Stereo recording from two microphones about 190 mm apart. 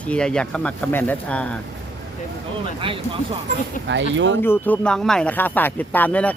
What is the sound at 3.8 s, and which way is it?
Speech, 75° right (ahead or behind).